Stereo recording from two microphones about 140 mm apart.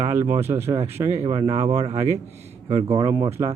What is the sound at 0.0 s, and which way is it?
A man's voice, 20° right (ahead or behind).